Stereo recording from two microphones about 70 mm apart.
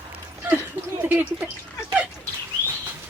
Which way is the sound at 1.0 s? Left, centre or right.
Right.